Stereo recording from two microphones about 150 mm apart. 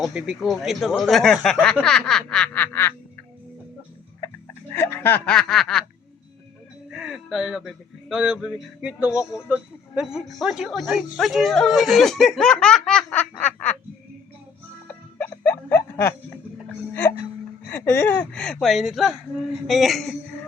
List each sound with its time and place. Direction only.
0.0 s speech: 5° right (ahead or behind); by 2.9 s 15° left (ahead or behind)
4.2 s a sound: 20° left (ahead or behind)
4.7 s speech: 15° left (ahead or behind)
6.9 s speech: centre (ahead or behind)
14.8 s music: 10° left (ahead or behind)
16.9 s hiccup: 10° left (ahead or behind)
17.7 s speech: 15° left (ahead or behind)